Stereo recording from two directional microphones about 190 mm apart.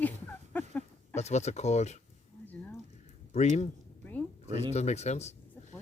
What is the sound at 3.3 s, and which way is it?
Speech, 35° left (ahead or behind).